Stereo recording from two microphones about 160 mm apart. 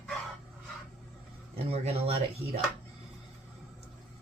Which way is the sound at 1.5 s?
40° right (ahead or behind).